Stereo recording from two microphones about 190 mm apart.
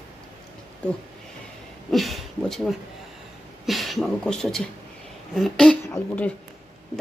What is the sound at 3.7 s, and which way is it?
Beatboxing, centre (ahead or behind).